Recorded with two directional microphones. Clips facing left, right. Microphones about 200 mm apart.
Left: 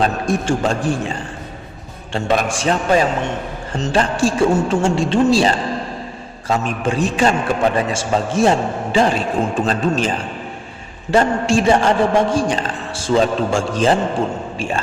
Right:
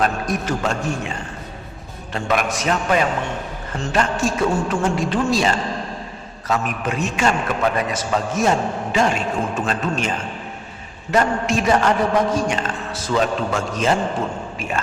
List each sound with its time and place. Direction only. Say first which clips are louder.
0.0 s a man's voice: left 3 dB; 30° left (ahead or behind)
2.1 s a man's voice: left 3 dB; 30° left (ahead or behind)